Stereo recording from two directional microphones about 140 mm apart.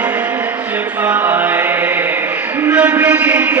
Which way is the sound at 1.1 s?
15° right (ahead or behind).